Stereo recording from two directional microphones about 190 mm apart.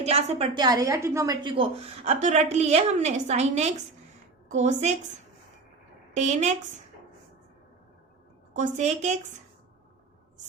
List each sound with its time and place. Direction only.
0.0 s a woman's voice: 35° right (ahead or behind)
6.1 s a woman's voice: 35° right (ahead or behind)
8.5 s a woman's voice: 40° right (ahead or behind)